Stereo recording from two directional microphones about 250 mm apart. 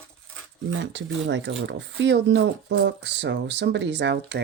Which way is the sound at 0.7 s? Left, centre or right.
Right.